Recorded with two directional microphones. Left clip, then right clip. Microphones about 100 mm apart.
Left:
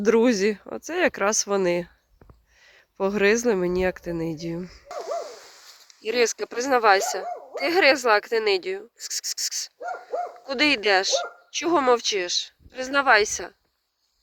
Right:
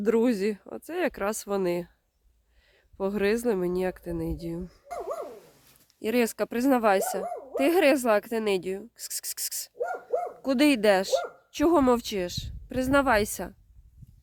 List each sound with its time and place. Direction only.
0.0 s speech: 10° right (ahead or behind)
5.9 s speech: 40° right (ahead or behind)